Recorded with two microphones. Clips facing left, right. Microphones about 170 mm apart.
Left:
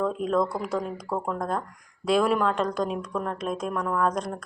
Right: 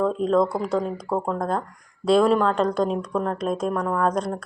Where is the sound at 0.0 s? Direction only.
30° right (ahead or behind).